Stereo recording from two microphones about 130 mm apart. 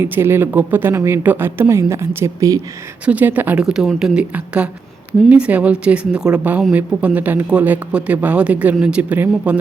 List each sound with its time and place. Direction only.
0.0 s speech: 20° right (ahead or behind)